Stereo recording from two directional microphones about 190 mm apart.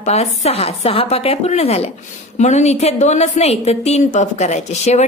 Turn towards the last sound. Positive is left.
turn(degrees=35)  # may be behind; listen again after turning